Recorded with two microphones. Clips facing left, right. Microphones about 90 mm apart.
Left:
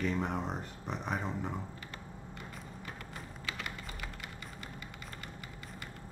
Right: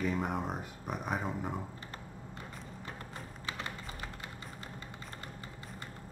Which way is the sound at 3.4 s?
30° right (ahead or behind).